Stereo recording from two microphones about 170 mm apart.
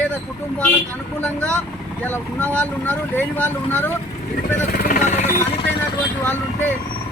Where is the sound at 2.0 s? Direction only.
10° left (ahead or behind).